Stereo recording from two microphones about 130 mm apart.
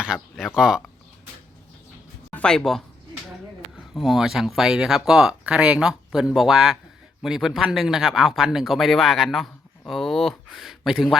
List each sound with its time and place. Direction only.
0.0 s speech: 5° right (ahead or behind)
2.3 s speech: 10° left (ahead or behind)
3.9 s speech: centre (ahead or behind)